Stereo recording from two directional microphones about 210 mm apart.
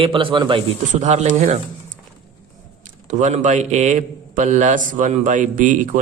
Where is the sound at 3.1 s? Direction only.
35° right (ahead or behind).